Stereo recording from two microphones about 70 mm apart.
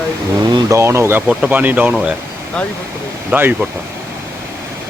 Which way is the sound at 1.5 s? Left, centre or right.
Right.